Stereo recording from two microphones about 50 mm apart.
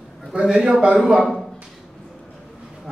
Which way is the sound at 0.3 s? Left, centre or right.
Centre.